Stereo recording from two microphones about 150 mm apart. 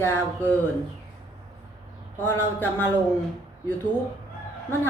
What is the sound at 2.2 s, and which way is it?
Speech, 15° left (ahead or behind).